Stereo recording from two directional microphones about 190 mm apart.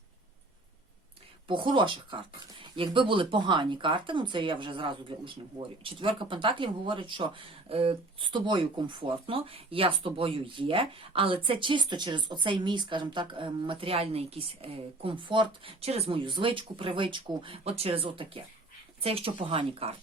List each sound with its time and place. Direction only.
1.5 s speech: 25° right (ahead or behind)